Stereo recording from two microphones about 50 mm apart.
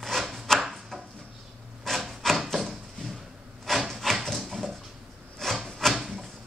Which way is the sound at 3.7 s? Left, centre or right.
Centre.